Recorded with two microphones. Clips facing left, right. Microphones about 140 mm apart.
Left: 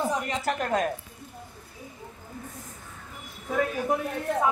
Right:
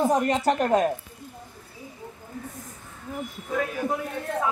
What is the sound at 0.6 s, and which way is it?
Speech, 25° right (ahead or behind).